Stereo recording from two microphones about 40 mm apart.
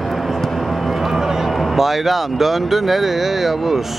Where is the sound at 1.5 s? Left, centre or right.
Centre.